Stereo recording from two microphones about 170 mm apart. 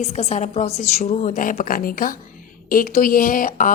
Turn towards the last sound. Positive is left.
turn(degrees=50)  # may be behind; listen again after turning